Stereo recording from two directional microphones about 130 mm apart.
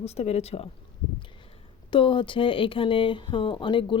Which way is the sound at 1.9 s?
40° left (ahead or behind).